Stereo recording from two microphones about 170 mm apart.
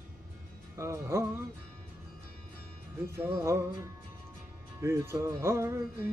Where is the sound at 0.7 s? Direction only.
15° right (ahead or behind).